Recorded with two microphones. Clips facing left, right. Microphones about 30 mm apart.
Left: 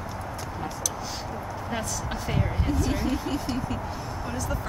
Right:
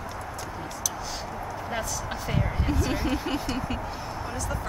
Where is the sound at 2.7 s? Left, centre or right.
Centre.